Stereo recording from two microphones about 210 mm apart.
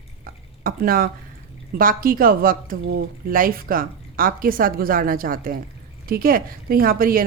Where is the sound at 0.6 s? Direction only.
45° right (ahead or behind).